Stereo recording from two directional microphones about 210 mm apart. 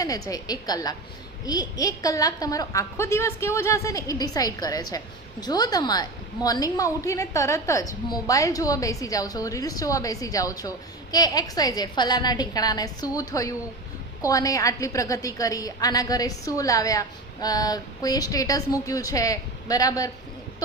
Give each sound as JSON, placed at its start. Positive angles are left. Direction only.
{"t": 0.0, "sound": "a woman's voice", "side_deg": 15}